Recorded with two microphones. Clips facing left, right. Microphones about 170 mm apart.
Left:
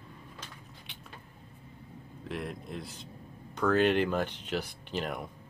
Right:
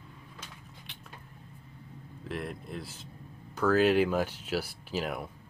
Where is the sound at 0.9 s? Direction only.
Centre (ahead or behind).